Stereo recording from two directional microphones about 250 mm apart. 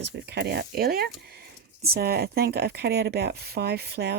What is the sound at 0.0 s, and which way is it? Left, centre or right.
Speech, right.